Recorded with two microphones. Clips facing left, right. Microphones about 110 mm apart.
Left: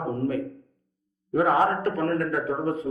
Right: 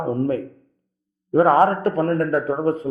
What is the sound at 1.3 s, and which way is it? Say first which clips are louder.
Speech: right 6 dB; 40° right (ahead or behind).